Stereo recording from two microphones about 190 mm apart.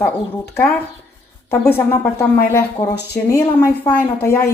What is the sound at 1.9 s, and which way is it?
A woman's voice, 15° left (ahead or behind).